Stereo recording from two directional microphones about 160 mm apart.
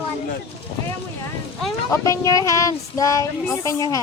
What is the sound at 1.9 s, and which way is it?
Speech, 20° left (ahead or behind).